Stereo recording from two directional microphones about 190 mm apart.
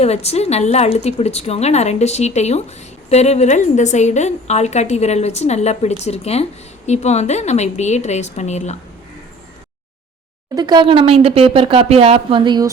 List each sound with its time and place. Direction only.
0.0 s speech: 35° left (ahead or behind)
10.5 s speech: 20° right (ahead or behind)